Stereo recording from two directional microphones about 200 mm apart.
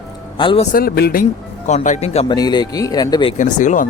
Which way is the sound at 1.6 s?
35° left (ahead or behind).